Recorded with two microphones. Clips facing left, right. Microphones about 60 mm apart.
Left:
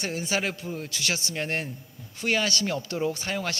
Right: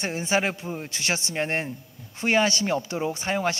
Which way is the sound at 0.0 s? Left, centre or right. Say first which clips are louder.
Right 4 dB; right.